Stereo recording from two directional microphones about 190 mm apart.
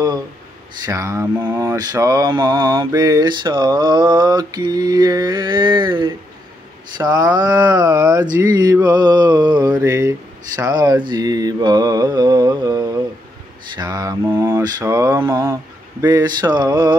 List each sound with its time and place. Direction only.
0.8 s mantra: 15° right (ahead or behind)